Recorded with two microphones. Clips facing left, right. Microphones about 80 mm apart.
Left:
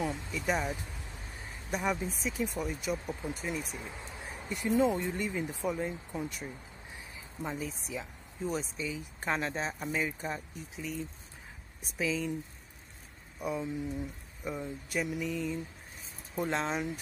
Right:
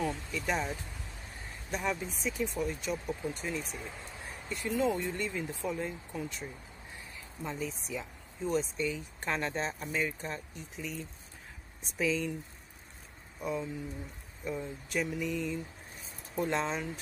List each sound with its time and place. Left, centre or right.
0.0 s speech: centre
3.8 s speech: centre
7.5 s speech: centre
13.4 s speech: centre